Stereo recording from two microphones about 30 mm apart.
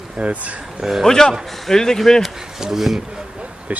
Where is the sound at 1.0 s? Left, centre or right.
Centre.